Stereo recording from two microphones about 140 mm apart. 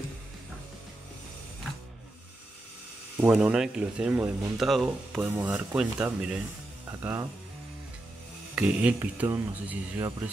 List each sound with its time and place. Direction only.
3.2 s speech: 5° right (ahead or behind)
5.2 s speech: 15° right (ahead or behind)
6.9 s speech: 20° right (ahead or behind)
8.5 s speech: 10° right (ahead or behind)